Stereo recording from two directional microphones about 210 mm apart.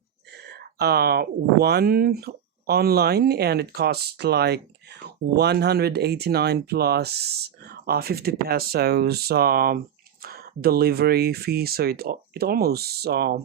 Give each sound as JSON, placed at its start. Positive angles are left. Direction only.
{"t": 0.8, "sound": "speech", "side_deg": -50}